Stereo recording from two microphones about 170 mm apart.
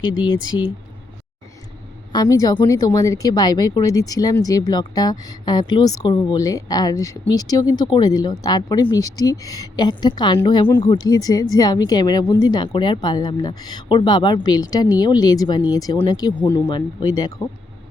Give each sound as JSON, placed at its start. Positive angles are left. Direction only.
{"t": 0.0, "sound": "speech", "side_deg": 30}
{"t": 2.1, "sound": "speech", "side_deg": 20}